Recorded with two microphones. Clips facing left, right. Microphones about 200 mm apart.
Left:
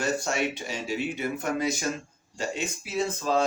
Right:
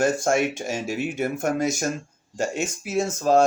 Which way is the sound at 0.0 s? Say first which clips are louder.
Right 6 dB; 50° right (ahead or behind).